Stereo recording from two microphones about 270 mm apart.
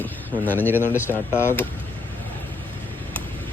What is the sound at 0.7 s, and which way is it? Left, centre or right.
Speech, centre.